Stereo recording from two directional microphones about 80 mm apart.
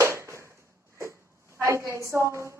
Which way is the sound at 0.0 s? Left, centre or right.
Right.